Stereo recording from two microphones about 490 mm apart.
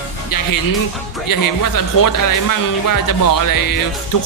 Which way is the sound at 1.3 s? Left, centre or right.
Left.